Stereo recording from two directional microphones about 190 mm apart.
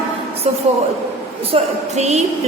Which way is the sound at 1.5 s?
35° right (ahead or behind).